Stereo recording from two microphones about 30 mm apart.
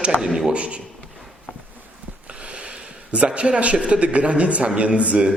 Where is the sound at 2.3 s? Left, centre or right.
Right.